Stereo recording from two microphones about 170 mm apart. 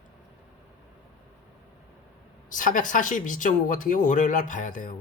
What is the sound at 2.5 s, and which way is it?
Speech, 50° left (ahead or behind).